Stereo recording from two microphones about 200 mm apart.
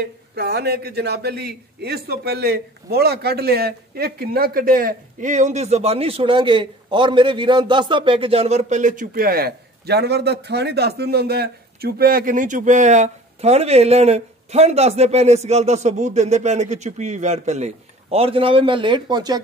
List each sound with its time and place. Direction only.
0.0 s a man's voice: 55° right (ahead or behind); by 19.4 s 20° right (ahead or behind)